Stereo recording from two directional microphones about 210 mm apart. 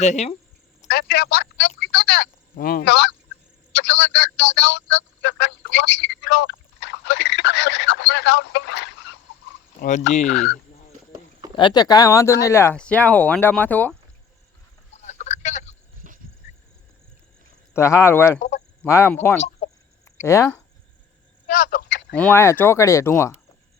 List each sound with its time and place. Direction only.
0.0 s speech: 35° left (ahead or behind)
0.9 s a woman's voice: 50° left (ahead or behind)
11.1 s a sound: 20° right (ahead or behind)
11.5 s speech: 20° left (ahead or behind)
14.9 s a sound: 30° left (ahead or behind)
17.7 s speech: 15° left (ahead or behind)
18.3 s speech: 35° left (ahead or behind)
18.9 s speech: 10° left (ahead or behind)
19.6 s chicken: 35° left (ahead or behind)
20.1 s speech: 15° left (ahead or behind)
21.5 s speech: 40° left (ahead or behind)
22.1 s speech: 10° left (ahead or behind)